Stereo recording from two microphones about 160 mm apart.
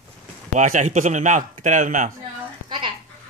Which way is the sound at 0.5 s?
50° right (ahead or behind).